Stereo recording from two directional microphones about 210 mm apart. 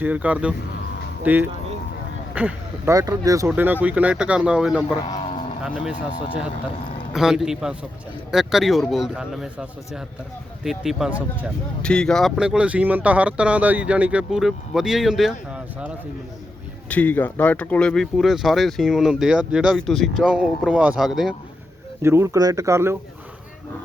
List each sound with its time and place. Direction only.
0.0 s speech: 5° right (ahead or behind)
5.0 s a sound: 20° left (ahead or behind)
5.6 s speech: centre (ahead or behind)
7.1 s speech: centre (ahead or behind)
16.9 s speech: 10° left (ahead or behind)
22.0 s speech: 10° right (ahead or behind)